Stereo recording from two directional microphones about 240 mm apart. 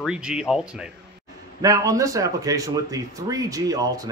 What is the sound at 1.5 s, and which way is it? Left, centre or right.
Speech, centre.